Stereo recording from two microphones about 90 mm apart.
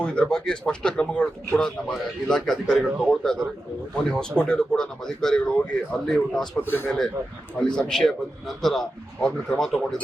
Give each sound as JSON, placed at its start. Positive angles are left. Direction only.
{"t": 0.0, "sound": "a man's voice", "side_deg": 10}
{"t": 6.6, "sound": "a man's voice", "side_deg": 20}
{"t": 7.8, "sound": "a man's voice", "side_deg": 5}